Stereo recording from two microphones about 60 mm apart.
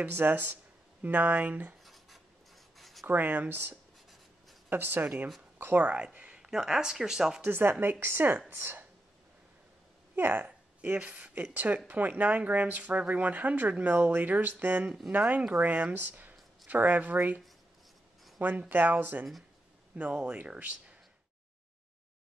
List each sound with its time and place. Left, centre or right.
0.0 s speech: right
2.8 s writing: centre
3.1 s speech: right
5.9 s speech: centre
7.4 s speech: right
10.1 s speech: right
10.8 s speech: right
18.7 s speech: right
20.0 s speech: centre